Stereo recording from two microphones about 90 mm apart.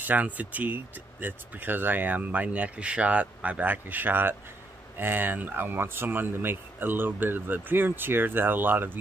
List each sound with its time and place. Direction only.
0.0 s speech: 20° right (ahead or behind)